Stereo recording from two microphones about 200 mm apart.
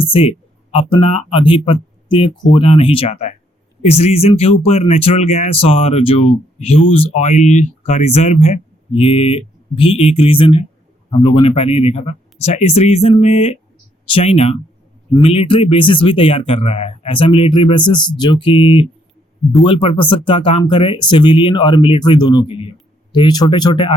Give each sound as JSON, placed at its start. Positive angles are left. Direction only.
{"t": 0.0, "sound": "speech", "side_deg": 30}